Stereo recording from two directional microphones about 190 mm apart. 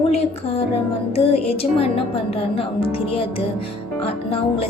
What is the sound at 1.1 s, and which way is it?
A woman's voice, 30° left (ahead or behind).